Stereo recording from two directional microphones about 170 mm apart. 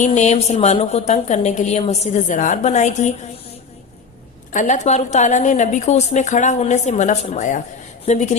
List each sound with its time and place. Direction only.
0.0 s a woman's voice: 45° left (ahead or behind)
4.5 s a woman's voice: 45° left (ahead or behind)